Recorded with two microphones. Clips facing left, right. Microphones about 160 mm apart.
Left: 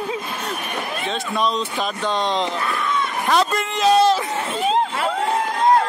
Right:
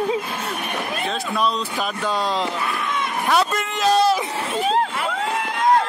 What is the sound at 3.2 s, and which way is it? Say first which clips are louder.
Speech: left 1 dB; centre (ahead or behind).